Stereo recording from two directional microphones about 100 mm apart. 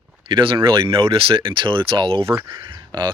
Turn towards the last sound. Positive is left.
turn(degrees=-45)  # may be behind; listen again after turning